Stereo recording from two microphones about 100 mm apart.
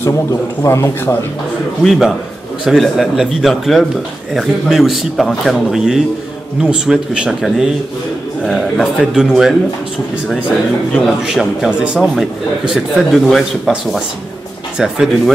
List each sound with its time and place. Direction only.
0.0 s a man's voice: 25° left (ahead or behind)
1.8 s a man's voice: centre (ahead or behind)
11.2 s a man's voice: 5° right (ahead or behind)